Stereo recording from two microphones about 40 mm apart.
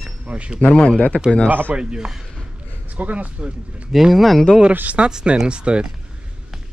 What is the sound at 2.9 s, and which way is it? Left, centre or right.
Speech, right.